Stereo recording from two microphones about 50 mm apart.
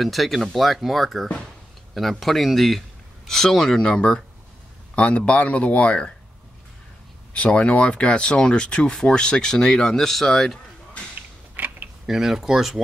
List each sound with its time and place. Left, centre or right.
0.0 s speech: centre
3.8 s speech: centre
7.3 s speech: left; by 10.6 s centre
11.5 s mechanisms: right
12.1 s speech: centre